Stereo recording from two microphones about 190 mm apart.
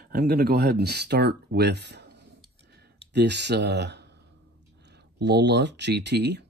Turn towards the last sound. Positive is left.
turn(degrees=-65)  # may be behind; listen again after turning